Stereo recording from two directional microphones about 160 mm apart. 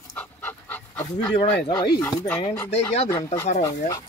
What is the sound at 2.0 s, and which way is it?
Speech, 10° left (ahead or behind).